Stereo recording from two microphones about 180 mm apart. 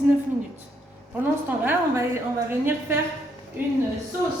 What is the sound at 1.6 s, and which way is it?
Speech, 10° right (ahead or behind).